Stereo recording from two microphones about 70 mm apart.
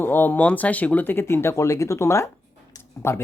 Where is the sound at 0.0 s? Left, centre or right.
Left.